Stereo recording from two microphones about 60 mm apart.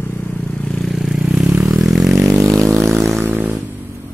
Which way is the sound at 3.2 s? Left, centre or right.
Right.